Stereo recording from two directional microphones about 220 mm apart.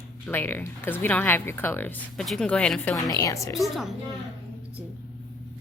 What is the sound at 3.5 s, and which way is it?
Speech, centre (ahead or behind).